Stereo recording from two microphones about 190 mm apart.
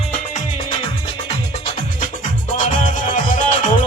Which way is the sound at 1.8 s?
45° left (ahead or behind).